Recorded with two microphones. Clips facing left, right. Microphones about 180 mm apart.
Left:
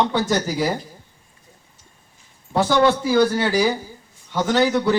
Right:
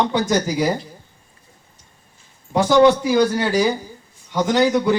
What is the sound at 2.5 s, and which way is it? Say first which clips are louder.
A man's voice: right 4 dB; 15° right (ahead or behind).